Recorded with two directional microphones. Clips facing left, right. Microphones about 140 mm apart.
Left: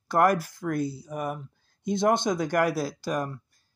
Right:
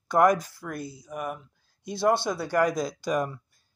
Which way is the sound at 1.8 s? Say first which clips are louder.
Left 1 dB; 20° left (ahead or behind).